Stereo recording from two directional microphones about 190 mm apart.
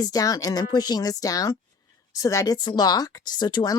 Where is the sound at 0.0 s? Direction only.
20° left (ahead or behind).